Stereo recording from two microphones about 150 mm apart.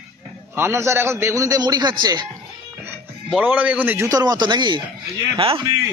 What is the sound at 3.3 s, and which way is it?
A man's voice, 10° right (ahead or behind).